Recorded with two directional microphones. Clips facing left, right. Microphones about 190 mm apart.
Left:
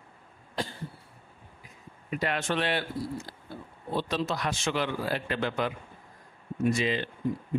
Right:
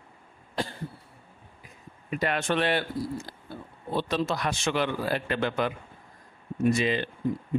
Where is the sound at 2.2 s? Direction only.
55° right (ahead or behind).